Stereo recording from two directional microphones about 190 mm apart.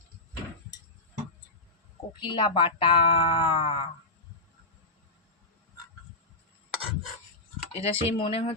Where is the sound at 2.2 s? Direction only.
25° left (ahead or behind).